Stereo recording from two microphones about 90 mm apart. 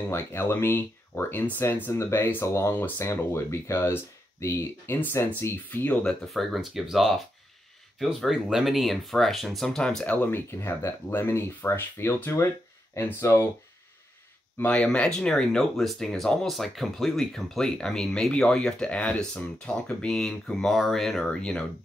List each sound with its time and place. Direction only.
0.1 s speech: 30° left (ahead or behind)
6.2 s speech: centre (ahead or behind)
10.0 s speech: 20° left (ahead or behind)
14.7 s speech: 10° left (ahead or behind)